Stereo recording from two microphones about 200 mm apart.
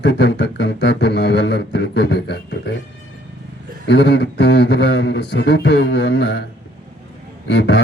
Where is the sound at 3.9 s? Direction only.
55° left (ahead or behind).